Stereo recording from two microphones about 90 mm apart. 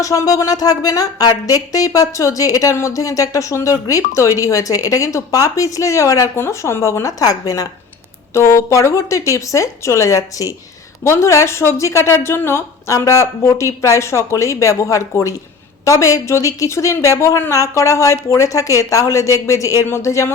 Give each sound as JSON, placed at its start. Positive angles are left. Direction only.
{"t": 0.0, "sound": "speech", "side_deg": 40}